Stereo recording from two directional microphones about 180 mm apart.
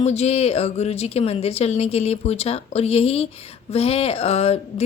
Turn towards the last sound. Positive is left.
turn(degrees=35)  # may be behind; listen again after turning